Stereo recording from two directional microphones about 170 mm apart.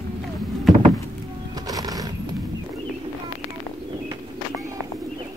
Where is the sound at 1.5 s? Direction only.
20° right (ahead or behind).